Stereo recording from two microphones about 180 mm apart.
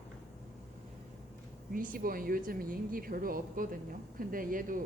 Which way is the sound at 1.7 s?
50° right (ahead or behind).